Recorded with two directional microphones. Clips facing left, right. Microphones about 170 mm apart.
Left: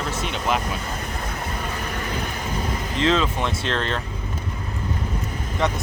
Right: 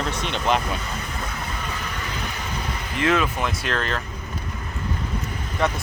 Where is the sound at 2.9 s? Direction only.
25° left (ahead or behind).